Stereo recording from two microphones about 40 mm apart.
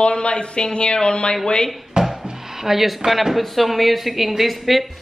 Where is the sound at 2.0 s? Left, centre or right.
Right.